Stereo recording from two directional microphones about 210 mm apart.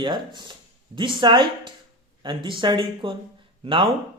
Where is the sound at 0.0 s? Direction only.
20° right (ahead or behind).